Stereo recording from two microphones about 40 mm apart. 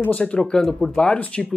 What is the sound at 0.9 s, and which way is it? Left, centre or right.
Speech, left.